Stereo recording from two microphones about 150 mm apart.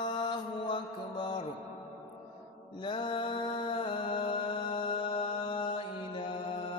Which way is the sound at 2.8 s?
35° left (ahead or behind).